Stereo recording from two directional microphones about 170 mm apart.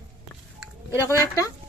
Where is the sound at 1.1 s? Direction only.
15° left (ahead or behind).